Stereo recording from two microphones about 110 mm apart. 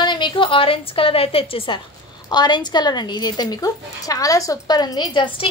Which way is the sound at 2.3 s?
40° left (ahead or behind).